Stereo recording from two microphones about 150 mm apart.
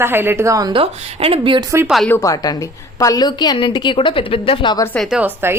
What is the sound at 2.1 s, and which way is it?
A woman's voice, 20° left (ahead or behind).